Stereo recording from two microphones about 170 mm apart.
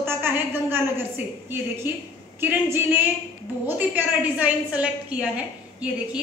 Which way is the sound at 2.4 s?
15° right (ahead or behind).